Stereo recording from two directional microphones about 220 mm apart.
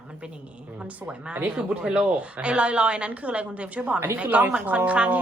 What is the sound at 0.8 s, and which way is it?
Speech, 5° right (ahead or behind).